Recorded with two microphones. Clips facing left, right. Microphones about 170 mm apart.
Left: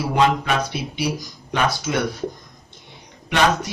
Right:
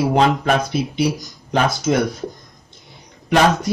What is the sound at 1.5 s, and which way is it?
Speech, 40° right (ahead or behind).